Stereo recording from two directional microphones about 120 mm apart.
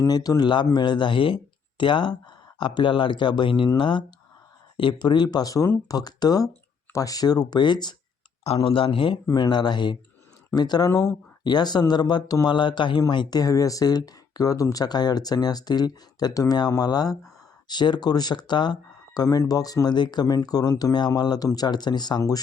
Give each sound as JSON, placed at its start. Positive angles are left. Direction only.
{"t": 0.0, "sound": "speech", "side_deg": 30}
{"t": 8.4, "sound": "speech", "side_deg": 50}
{"t": 11.4, "sound": "speech", "side_deg": 35}